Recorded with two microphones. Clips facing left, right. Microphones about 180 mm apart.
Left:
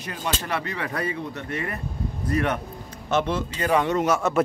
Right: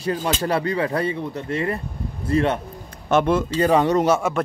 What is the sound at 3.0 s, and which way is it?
Speech, 55° right (ahead or behind).